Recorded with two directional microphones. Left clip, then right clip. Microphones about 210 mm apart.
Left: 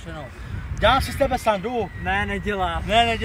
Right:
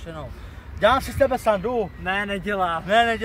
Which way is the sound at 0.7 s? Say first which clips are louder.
Even; 15° right (ahead or behind).